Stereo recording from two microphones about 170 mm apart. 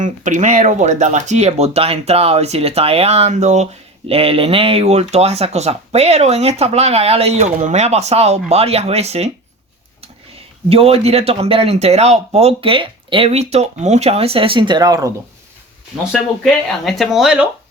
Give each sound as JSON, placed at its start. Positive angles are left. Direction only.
{"t": 0.0, "sound": "speech", "side_deg": -45}
{"t": 10.7, "sound": "speech", "side_deg": -35}
{"t": 16.4, "sound": "speech", "side_deg": 0}